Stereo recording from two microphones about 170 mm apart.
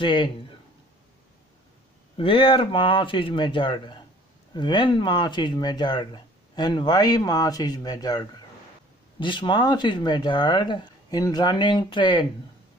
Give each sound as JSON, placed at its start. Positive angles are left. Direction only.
{"t": 0.0, "sound": "speech", "side_deg": 30}
{"t": 2.1, "sound": "speech", "side_deg": 30}